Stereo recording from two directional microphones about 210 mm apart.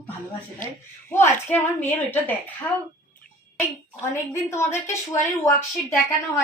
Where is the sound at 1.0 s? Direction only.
10° left (ahead or behind).